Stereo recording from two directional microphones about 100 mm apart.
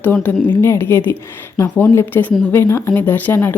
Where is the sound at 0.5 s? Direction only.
25° left (ahead or behind).